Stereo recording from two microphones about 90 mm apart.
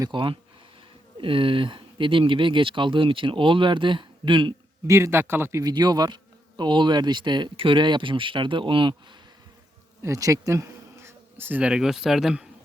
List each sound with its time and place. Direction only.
0.1 s speech: 65° right (ahead or behind)
1.2 s speech: 75° right (ahead or behind)
4.9 s speech: 30° right (ahead or behind)
5.6 s speech: 50° right (ahead or behind)
7.5 s speech: 75° right (ahead or behind)
10.0 s insect: 40° right (ahead or behind)
11.6 s speech: 5° right (ahead or behind)